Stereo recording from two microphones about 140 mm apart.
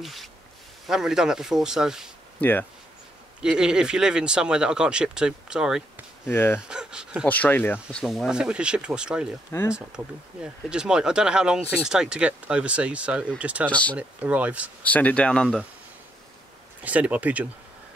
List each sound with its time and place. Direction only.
0.0 s speech: centre (ahead or behind)
3.4 s speech: 5° right (ahead or behind)
6.2 s speech: 15° left (ahead or behind)
6.7 s a sound: 5° right (ahead or behind)
7.2 s speech: 10° left (ahead or behind)
8.0 s speech: centre (ahead or behind)
13.7 s speech: 10° left (ahead or behind)
13.9 s speech: 10° right (ahead or behind)
14.8 s speech: 10° left (ahead or behind)
16.8 s speech: 10° right (ahead or behind)